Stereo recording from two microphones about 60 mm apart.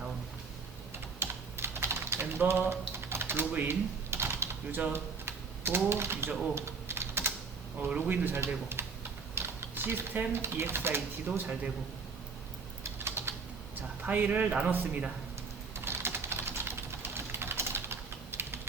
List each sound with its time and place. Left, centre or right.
1.2 s typing: right
5.9 s speech: right
6.5 s typing: right
7.9 s speech: right
8.8 s typing: right
9.3 s speech: right
13.0 s typing: right
14.0 s a man's voice: right
15.7 s typing: right